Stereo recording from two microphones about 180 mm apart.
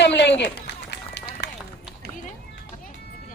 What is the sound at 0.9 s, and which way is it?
Run, 70° left (ahead or behind).